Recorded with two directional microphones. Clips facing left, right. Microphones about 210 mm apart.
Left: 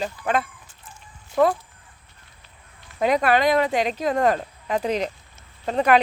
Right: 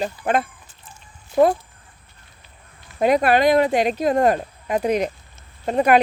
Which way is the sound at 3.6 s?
10° right (ahead or behind).